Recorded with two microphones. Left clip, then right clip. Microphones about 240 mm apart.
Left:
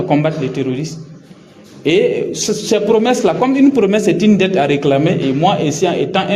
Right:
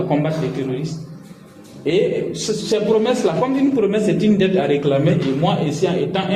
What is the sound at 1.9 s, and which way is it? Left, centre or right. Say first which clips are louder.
A man's voice: left 5 dB; left.